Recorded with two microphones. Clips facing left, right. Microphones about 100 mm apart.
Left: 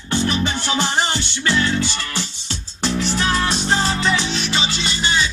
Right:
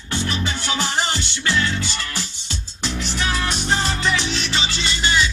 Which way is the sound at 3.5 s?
25° left (ahead or behind).